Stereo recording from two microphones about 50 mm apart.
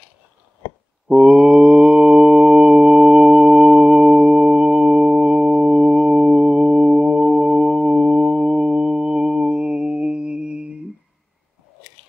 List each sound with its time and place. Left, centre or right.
1.0 s mantra: centre